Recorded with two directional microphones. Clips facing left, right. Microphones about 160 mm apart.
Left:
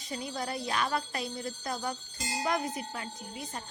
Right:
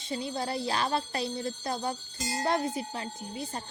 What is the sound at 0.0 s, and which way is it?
A woman's voice, 25° right (ahead or behind).